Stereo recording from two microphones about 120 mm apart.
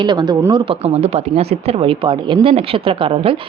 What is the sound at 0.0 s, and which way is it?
Speech, 35° right (ahead or behind).